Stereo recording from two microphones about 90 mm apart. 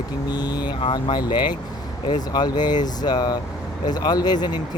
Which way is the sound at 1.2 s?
55° left (ahead or behind).